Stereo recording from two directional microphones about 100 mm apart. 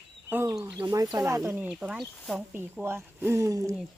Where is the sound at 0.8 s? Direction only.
45° right (ahead or behind).